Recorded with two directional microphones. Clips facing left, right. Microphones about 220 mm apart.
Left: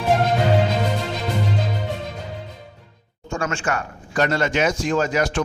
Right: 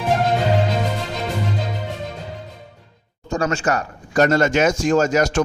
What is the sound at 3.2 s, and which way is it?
A man's voice, 35° right (ahead or behind).